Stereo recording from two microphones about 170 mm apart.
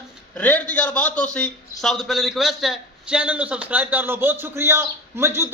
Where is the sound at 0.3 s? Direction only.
10° left (ahead or behind).